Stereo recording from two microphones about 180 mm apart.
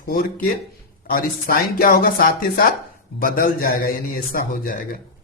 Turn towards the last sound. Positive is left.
turn(degrees=50)  # may be behind; listen again after turning